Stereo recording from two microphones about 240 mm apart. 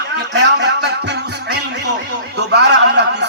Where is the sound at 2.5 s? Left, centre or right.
Right.